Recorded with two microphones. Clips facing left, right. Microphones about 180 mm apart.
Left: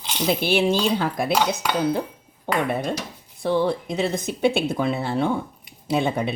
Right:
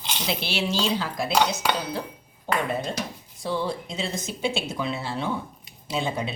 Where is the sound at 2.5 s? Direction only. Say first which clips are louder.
Left 3 dB; 65° left (ahead or behind).